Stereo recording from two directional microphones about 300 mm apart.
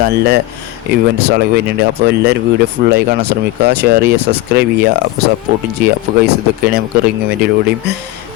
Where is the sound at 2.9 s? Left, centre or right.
Right.